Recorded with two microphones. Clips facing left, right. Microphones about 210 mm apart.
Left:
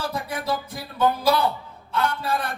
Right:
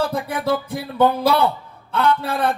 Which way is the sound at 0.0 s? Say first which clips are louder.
Right 6 dB; 60° right (ahead or behind).